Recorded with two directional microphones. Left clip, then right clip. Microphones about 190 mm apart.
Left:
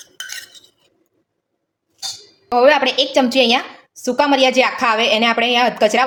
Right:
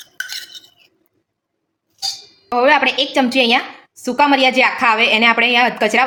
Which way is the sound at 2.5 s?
15° left (ahead or behind).